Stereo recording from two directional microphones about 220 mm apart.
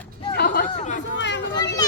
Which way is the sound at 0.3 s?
50° left (ahead or behind).